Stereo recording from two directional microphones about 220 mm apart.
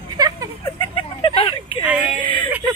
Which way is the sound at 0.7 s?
25° left (ahead or behind).